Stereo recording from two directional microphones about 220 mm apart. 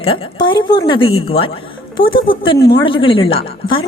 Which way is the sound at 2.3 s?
25° left (ahead or behind).